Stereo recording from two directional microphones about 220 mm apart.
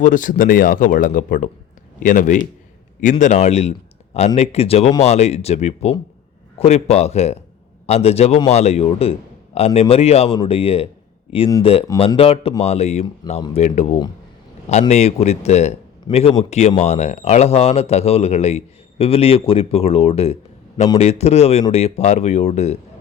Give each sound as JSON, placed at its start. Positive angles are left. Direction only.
{"t": 0.0, "sound": "a man's voice", "side_deg": 35}